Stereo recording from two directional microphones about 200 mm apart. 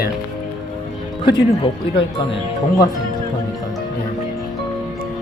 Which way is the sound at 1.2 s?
25° left (ahead or behind).